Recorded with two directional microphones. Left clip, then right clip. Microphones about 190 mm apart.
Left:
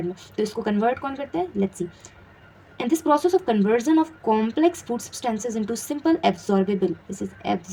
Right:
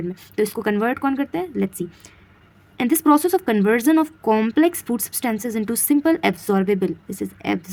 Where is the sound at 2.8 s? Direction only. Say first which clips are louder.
Right 3 dB; 45° right (ahead or behind).